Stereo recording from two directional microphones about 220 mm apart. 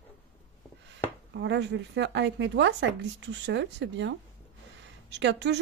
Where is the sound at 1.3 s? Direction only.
50° right (ahead or behind).